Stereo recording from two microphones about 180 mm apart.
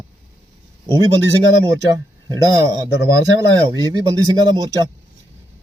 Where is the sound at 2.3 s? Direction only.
20° right (ahead or behind).